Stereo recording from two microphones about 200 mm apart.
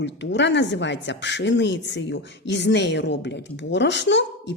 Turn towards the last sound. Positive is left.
turn(degrees=60)  # may be behind; listen again after turning